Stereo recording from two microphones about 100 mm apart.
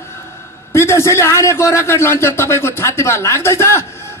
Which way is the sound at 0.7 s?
25° left (ahead or behind).